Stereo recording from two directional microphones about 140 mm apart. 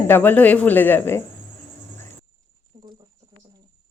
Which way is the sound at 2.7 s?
20° right (ahead or behind).